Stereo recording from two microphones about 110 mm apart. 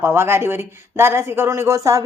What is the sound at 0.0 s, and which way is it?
Speech, 25° right (ahead or behind).